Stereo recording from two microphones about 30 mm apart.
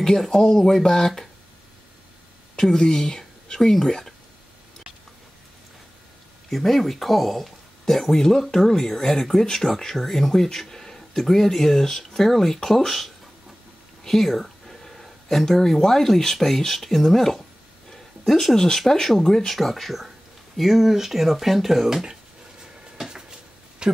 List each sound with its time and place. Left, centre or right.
0.0 s speech: centre
2.8 s speech: left
6.5 s speech: centre
7.8 s speech: centre
18.4 s speech: centre
23.8 s a sound: right